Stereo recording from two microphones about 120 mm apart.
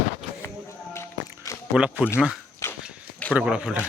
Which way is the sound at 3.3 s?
10° right (ahead or behind).